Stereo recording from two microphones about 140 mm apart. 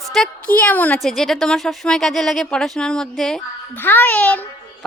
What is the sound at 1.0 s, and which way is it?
Speech, centre (ahead or behind).